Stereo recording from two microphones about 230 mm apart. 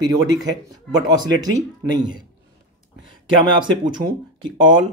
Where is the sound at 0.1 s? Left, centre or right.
Centre.